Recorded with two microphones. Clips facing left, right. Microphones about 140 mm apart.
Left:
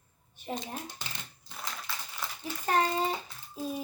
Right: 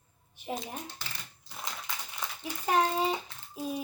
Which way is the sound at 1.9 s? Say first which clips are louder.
Even; 20° right (ahead or behind).